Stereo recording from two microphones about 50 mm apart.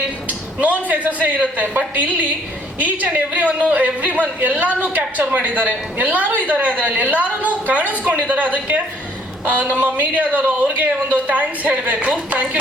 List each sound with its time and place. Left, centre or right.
0.9 s a man's voice: right